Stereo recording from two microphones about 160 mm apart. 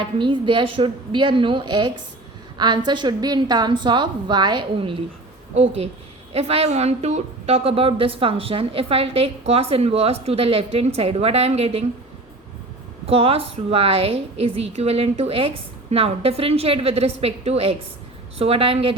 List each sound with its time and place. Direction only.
0.0 s a woman's voice: 30° right (ahead or behind)
13.1 s a woman's voice: 35° right (ahead or behind)